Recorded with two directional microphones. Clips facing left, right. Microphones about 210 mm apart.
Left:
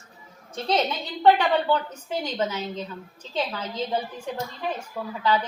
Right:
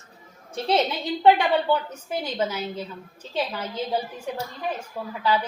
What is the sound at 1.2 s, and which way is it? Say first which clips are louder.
A woman's voice: even; 10° right (ahead or behind).